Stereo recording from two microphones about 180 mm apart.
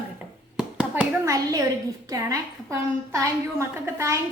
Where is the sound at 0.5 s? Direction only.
5° right (ahead or behind).